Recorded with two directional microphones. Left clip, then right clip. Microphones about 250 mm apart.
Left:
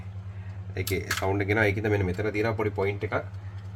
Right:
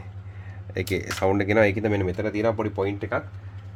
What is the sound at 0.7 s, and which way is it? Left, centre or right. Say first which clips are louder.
Speech: right 2 dB; right.